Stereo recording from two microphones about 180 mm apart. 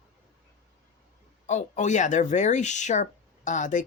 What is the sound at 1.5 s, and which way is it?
Speech, 40° left (ahead or behind).